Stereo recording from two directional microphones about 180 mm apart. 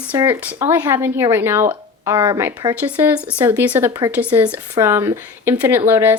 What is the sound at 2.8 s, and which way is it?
A woman's voice, 10° right (ahead or behind).